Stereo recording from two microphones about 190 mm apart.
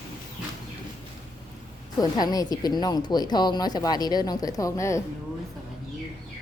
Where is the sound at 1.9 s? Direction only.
20° left (ahead or behind).